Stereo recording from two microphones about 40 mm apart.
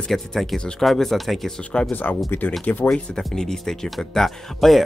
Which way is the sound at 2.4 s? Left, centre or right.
Left.